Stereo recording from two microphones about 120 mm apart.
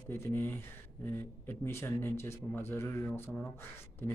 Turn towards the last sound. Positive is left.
turn(degrees=20)  # may be behind; listen again after turning